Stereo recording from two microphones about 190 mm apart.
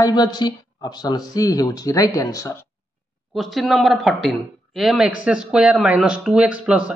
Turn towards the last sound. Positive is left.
turn(degrees=-5)  # may be behind; listen again after turning